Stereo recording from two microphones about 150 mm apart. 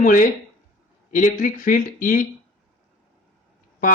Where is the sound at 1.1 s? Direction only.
60° left (ahead or behind).